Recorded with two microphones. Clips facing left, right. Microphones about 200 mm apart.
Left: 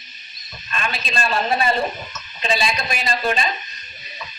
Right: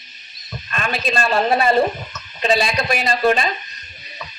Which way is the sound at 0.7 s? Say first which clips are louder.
Right 4 dB; 50° right (ahead or behind).